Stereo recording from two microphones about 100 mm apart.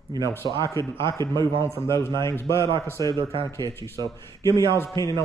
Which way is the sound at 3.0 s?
50° right (ahead or behind).